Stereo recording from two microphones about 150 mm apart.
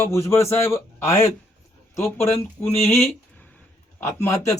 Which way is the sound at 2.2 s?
45° left (ahead or behind).